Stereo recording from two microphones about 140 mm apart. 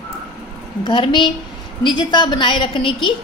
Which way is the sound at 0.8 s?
35° left (ahead or behind).